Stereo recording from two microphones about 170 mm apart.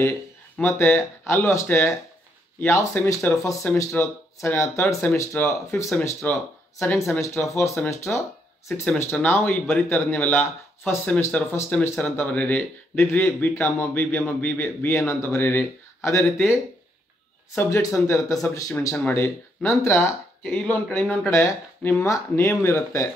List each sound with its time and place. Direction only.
0.6 s speech: 10° left (ahead or behind)
17.6 s speech: 15° left (ahead or behind)